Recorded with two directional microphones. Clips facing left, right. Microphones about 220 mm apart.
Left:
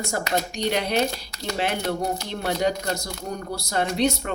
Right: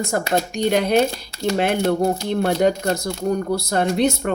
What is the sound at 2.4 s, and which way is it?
Speech, 50° right (ahead or behind).